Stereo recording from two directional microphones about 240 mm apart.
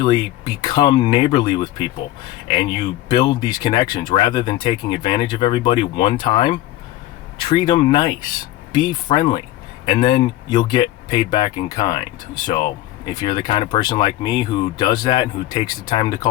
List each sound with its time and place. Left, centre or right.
0.0 s speech: centre
10.5 s speech: centre